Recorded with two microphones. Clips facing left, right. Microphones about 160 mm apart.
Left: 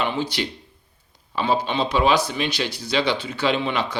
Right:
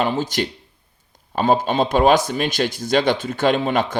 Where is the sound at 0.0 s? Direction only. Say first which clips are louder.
Right 4 dB; 45° right (ahead or behind).